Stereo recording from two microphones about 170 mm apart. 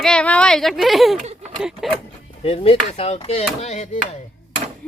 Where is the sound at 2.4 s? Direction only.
35° left (ahead or behind).